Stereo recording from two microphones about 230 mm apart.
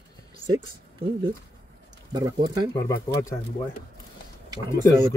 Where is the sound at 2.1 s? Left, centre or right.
Centre.